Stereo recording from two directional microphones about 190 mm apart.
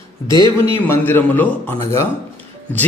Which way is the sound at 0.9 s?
10° left (ahead or behind).